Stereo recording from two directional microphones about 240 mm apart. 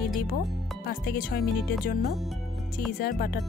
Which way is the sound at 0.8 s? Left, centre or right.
Left.